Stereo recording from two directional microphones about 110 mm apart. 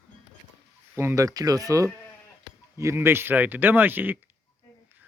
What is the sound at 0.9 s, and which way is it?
Speech, 25° right (ahead or behind).